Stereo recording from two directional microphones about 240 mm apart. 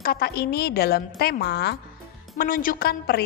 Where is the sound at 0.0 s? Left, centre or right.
Left.